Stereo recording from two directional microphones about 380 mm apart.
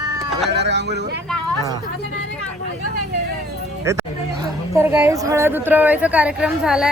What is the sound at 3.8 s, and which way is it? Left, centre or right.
Speech, centre.